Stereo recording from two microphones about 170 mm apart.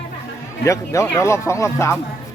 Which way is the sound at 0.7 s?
15° left (ahead or behind).